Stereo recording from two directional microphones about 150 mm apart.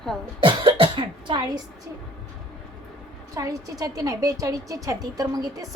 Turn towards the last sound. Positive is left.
turn(degrees=-25)  # may be behind; listen again after turning